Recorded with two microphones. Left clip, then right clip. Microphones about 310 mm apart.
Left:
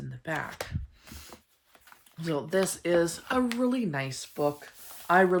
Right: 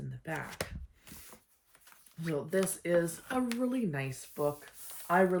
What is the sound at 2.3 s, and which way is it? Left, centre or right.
Speech, centre.